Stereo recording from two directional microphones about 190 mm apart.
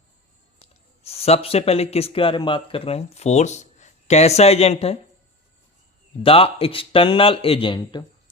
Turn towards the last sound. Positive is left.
turn(degrees=25)  # may be behind; listen again after turning